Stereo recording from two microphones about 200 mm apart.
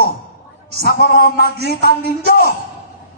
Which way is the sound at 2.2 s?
50° left (ahead or behind).